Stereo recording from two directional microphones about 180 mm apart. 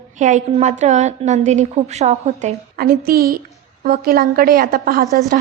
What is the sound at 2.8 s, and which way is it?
A woman's voice, 55° right (ahead or behind).